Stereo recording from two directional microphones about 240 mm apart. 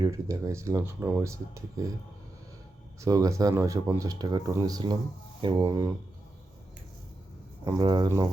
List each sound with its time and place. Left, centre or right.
0.0 s speech: centre
3.0 s speech: centre
7.6 s speech: centre